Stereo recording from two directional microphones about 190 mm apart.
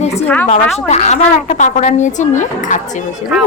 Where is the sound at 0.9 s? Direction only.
40° left (ahead or behind).